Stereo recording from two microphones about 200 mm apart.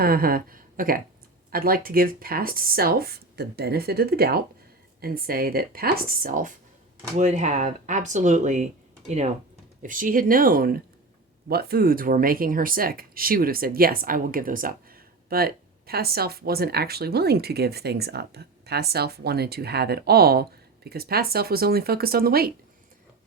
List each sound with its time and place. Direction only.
0.0 s speech: 50° right (ahead or behind)